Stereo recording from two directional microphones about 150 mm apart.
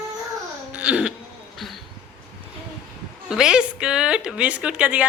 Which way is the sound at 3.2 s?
5° right (ahead or behind).